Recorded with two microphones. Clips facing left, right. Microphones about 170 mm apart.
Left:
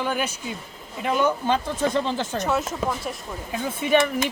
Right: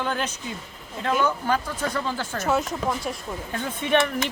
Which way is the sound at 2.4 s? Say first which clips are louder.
Right 3 dB; centre (ahead or behind).